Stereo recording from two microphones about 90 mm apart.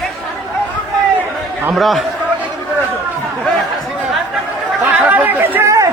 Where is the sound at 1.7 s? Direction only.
Centre (ahead or behind).